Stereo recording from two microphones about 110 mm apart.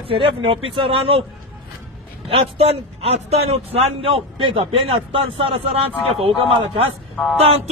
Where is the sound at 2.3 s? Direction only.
65° right (ahead or behind).